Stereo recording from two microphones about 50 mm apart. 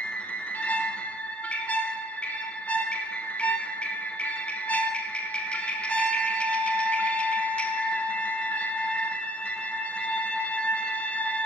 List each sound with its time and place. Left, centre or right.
3.3 s music: left
4.6 s music: left